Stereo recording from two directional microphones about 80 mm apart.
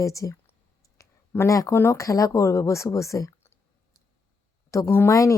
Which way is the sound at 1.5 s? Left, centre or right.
Left.